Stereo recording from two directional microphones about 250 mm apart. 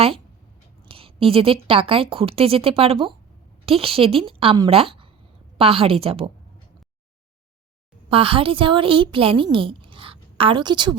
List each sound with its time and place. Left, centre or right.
0.9 s a woman's voice: right
8.1 s a woman's voice: right